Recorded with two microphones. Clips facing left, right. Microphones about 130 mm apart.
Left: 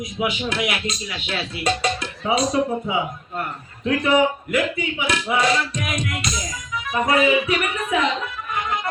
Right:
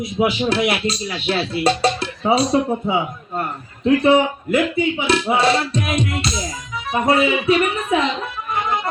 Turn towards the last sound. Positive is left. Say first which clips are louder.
# right 6 dB
turn(degrees=-30)  # may be behind; listen again after turning